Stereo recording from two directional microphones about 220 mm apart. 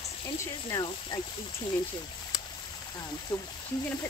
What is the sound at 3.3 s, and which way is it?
Speech, 20° left (ahead or behind).